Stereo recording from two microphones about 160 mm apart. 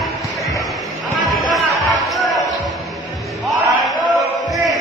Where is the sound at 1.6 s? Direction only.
Centre (ahead or behind).